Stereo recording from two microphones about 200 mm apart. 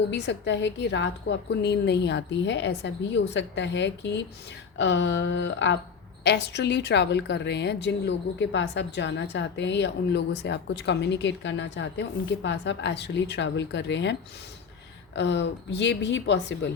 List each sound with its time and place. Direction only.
0.1 s a woman's voice: 60° left (ahead or behind)